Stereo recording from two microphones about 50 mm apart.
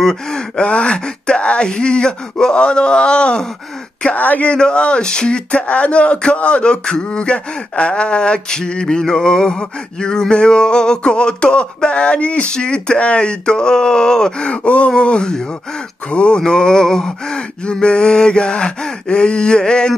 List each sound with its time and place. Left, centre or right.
0.0 s speech: centre
4.1 s speech: left
4.5 s speech: centre